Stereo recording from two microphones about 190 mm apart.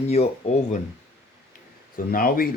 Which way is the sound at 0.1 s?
35° left (ahead or behind).